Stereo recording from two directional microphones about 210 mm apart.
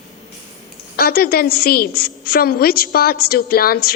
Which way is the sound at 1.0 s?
45° left (ahead or behind).